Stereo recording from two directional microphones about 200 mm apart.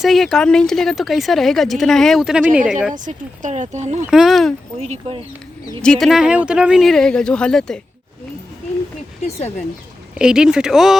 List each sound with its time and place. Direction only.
0.0 s speech: centre (ahead or behind)
2.9 s speech: 40° right (ahead or behind)
4.0 s speech: 5° right (ahead or behind)
4.8 s speech: 30° right (ahead or behind)
5.8 s speech: centre (ahead or behind)
10.2 s speech: 5° right (ahead or behind)